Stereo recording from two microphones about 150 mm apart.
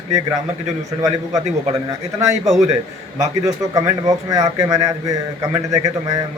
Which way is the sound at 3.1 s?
20° right (ahead or behind).